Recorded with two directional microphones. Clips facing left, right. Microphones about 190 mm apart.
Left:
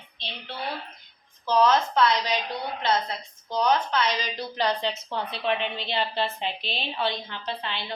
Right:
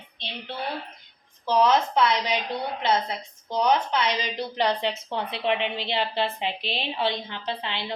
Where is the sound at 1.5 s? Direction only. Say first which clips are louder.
Even; 15° right (ahead or behind).